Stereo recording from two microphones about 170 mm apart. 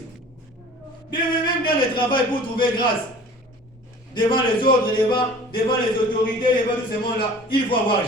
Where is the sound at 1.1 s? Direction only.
30° left (ahead or behind).